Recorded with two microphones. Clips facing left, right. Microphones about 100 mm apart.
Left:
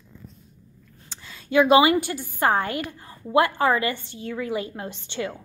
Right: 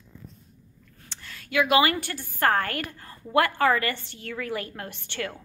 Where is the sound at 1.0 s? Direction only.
15° left (ahead or behind).